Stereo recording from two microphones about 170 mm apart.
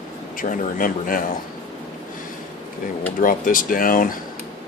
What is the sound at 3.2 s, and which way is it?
Speech, 55° left (ahead or behind).